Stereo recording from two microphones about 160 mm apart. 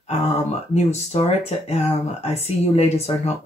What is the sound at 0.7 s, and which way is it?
Speech, 40° left (ahead or behind).